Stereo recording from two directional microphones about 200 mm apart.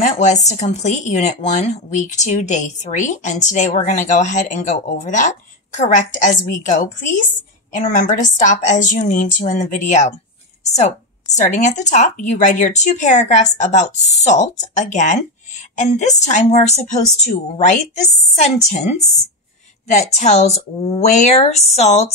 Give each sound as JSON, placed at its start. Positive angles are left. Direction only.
{"t": 0.0, "sound": "speech", "side_deg": 35}
{"t": 6.2, "sound": "speech", "side_deg": 40}
{"t": 11.3, "sound": "speech", "side_deg": 35}